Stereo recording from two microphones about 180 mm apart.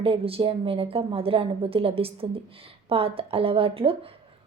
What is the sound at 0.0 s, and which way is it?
A woman's voice, 30° right (ahead or behind).